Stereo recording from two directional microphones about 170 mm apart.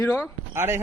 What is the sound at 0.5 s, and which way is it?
Speech, 15° right (ahead or behind).